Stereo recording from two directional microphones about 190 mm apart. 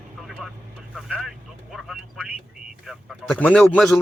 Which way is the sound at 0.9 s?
Centre (ahead or behind).